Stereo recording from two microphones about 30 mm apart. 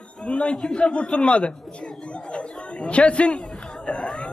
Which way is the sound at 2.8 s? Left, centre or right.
Left.